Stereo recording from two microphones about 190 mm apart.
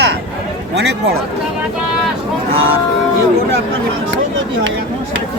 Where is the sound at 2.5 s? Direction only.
90° right.